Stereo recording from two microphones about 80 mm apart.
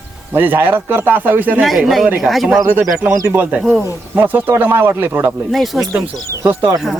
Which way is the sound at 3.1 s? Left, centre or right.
Right.